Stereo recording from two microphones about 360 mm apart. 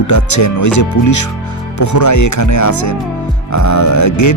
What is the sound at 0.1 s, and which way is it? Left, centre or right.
Speech, left.